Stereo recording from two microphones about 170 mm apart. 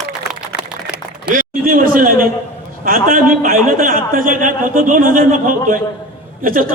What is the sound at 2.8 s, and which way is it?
A man's voice, 55° right (ahead or behind).